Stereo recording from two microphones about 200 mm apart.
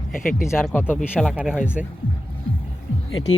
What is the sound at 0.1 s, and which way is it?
Speech, 45° left (ahead or behind).